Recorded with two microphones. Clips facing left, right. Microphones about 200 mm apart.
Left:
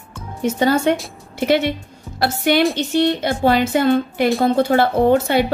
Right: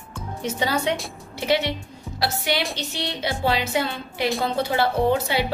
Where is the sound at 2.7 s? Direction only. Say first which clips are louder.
Left 13 dB; 50° left (ahead or behind).